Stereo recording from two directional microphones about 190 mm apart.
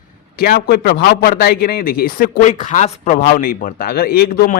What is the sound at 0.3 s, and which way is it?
A man's voice, 55° left (ahead or behind).